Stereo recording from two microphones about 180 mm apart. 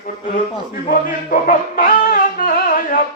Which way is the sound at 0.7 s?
50° left (ahead or behind).